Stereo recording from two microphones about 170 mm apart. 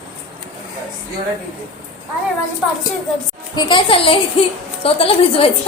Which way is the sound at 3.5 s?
25° left (ahead or behind).